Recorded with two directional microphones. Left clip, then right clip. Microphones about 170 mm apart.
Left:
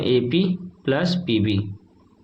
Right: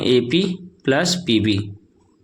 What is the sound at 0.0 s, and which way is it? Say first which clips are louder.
Speech: right 3 dB; 35° right (ahead or behind).